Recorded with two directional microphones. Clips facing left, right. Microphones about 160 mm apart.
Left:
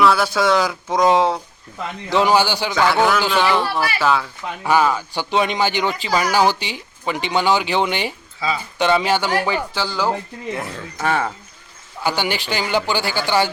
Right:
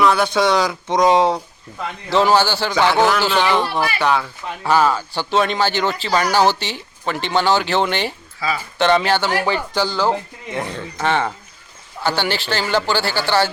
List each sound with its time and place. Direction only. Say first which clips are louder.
0.0 s speech: even; 5° left (ahead or behind)
2.0 s speech: right 1 dB; 15° left (ahead or behind)
2.7 s speech: right 1 dB; centre (ahead or behind)
4.6 s speech: right 1 dB; 15° left (ahead or behind)
8.4 s speech: even; 20° left (ahead or behind)
8.8 s speech: right 1 dB; 10° left (ahead or behind)